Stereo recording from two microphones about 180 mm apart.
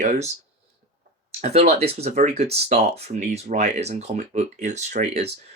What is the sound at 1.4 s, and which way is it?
Speech, 35° right (ahead or behind).